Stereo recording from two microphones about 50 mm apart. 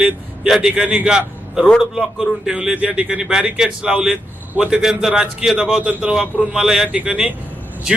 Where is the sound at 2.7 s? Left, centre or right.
Right.